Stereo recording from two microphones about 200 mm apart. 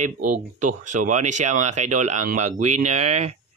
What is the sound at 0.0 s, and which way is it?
Speech, 40° right (ahead or behind).